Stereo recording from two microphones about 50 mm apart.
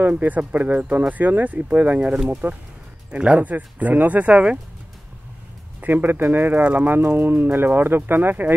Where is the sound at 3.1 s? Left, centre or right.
Right.